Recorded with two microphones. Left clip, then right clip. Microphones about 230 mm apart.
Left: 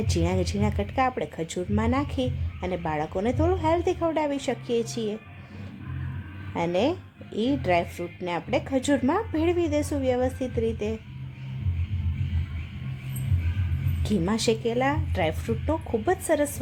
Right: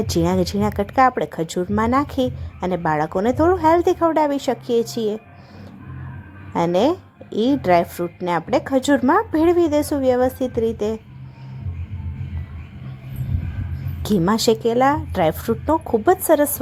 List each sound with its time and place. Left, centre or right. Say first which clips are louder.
0.1 s speech: right 7 dB; centre
6.5 s speech: right 7 dB; centre
14.0 s a woman's voice: right 8 dB; right